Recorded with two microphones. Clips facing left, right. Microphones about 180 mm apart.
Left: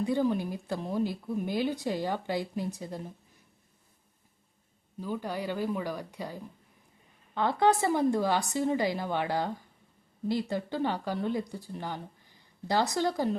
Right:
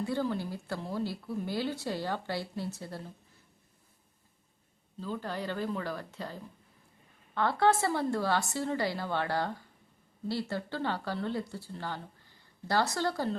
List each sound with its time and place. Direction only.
0.0 s a woman's voice: 15° left (ahead or behind)
4.9 s a woman's voice: 15° left (ahead or behind)